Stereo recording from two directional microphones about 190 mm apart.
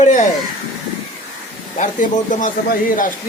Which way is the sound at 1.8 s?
40° left (ahead or behind).